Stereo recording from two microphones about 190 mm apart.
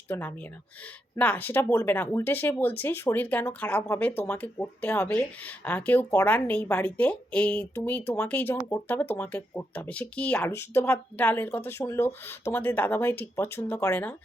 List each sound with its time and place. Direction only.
0.1 s speech: 10° left (ahead or behind)